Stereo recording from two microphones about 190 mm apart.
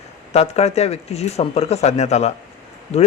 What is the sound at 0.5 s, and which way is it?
Speech, 35° left (ahead or behind).